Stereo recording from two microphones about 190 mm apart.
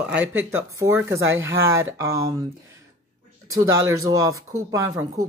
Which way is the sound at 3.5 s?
15° right (ahead or behind).